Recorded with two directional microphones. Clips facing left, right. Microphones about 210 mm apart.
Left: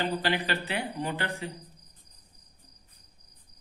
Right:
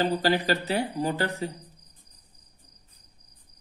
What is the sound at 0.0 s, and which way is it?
Speech, 40° right (ahead or behind).